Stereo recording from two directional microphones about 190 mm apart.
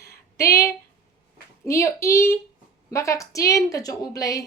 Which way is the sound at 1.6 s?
15° left (ahead or behind).